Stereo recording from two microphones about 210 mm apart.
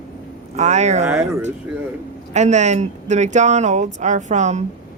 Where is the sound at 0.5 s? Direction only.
35° right (ahead or behind).